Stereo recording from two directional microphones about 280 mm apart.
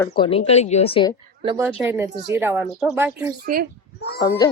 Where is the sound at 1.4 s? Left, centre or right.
Centre.